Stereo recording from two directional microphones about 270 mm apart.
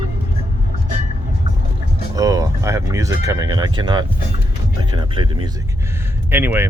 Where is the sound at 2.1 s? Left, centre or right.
Centre.